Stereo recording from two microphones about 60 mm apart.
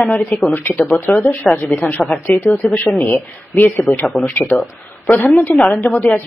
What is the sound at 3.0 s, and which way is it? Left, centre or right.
Speech, left.